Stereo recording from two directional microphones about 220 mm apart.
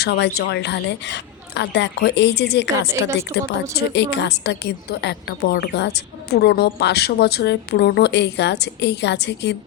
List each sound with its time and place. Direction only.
0.0 s a woman's voice: 45° left (ahead or behind)